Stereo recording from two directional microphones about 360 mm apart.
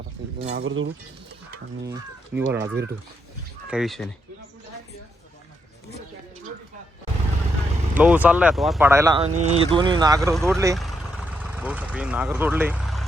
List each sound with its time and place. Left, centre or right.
0.3 s speech: centre
0.6 s speech: right
2.3 s speech: right
3.7 s speech: centre
7.9 s speech: centre